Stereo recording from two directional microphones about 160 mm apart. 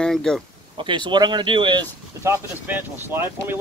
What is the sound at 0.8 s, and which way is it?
Speech, 30° right (ahead or behind).